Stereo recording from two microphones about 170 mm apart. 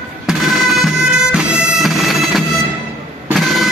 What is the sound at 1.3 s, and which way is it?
Bagpipes, 5° right (ahead or behind).